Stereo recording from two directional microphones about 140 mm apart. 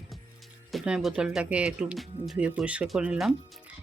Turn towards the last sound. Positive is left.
turn(degrees=-5)  # may be behind; listen again after turning